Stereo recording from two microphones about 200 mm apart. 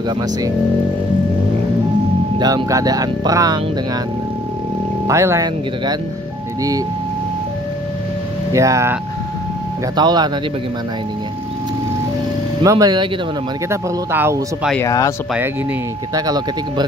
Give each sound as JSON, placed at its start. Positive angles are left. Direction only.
{"t": 2.3, "sound": "speech", "side_deg": -20}
{"t": 5.0, "sound": "speech", "side_deg": -15}
{"t": 8.5, "sound": "speech", "side_deg": -15}
{"t": 9.9, "sound": "speech", "side_deg": -20}
{"t": 12.6, "sound": "speech", "side_deg": -20}
{"t": 14.7, "sound": "speech", "side_deg": 15}
{"t": 16.2, "sound": "speech", "side_deg": -20}